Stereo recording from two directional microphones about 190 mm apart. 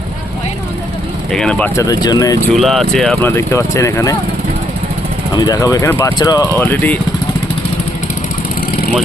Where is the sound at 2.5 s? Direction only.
Centre (ahead or behind).